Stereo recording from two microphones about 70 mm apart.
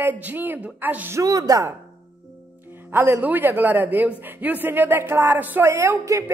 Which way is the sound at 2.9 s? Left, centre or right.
Right.